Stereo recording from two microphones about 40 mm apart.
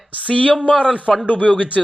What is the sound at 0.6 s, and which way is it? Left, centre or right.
Speech, right.